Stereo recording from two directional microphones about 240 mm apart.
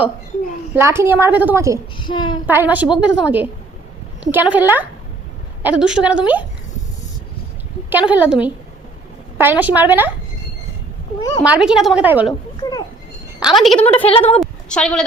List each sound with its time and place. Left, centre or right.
0.8 s a woman's voice: centre
2.0 s a woman's voice: centre
2.5 s a woman's voice: centre
7.9 s a woman's voice: centre
11.2 s a woman's voice: centre
11.4 s a woman's voice: centre
12.2 s speech: centre
13.6 s a woman's voice: centre
13.8 s a woman's voice: left
14.4 s a sound: centre